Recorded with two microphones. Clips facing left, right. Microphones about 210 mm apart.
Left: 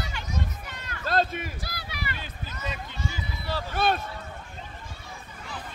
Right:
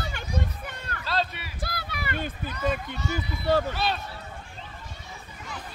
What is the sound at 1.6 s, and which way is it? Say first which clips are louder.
Run: right 3 dB; 55° right (ahead or behind).